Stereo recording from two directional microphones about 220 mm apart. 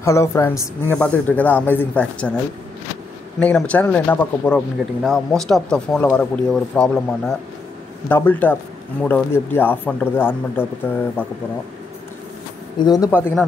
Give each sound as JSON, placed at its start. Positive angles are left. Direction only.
{"t": 0.0, "sound": "a woman's voice", "side_deg": 10}
{"t": 3.3, "sound": "a woman's voice", "side_deg": 5}
{"t": 12.7, "sound": "a woman's voice", "side_deg": 20}